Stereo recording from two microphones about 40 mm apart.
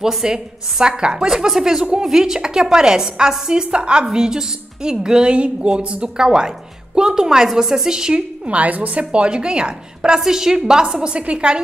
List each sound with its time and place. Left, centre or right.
0.0 s a woman's voice: centre
8.5 s a woman's voice: right